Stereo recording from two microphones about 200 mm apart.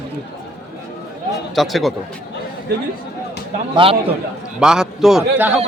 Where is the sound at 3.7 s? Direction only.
25° right (ahead or behind).